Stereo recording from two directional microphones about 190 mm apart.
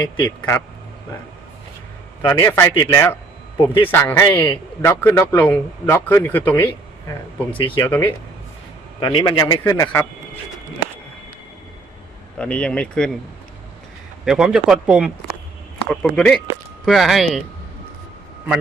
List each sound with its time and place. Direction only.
0.2 s speech: 15° left (ahead or behind)
2.2 s speech: 15° left (ahead or behind)
9.0 s a man's voice: 25° left (ahead or behind)
12.4 s speech: 5° left (ahead or behind)
14.3 s speech: 5° right (ahead or behind)